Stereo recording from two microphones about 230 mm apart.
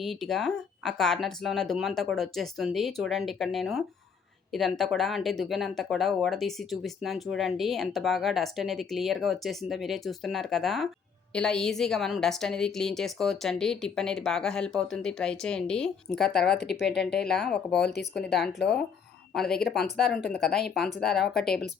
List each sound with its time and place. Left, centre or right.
0.0 s speech: centre
16.6 s speech: left
17.2 s speech: centre
19.3 s speech: centre
20.1 s speech: left
20.4 s speech: centre